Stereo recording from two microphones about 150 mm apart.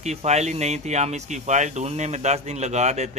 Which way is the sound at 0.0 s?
50° right (ahead or behind).